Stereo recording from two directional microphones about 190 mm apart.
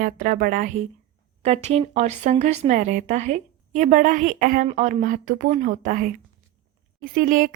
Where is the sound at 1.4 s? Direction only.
35° right (ahead or behind).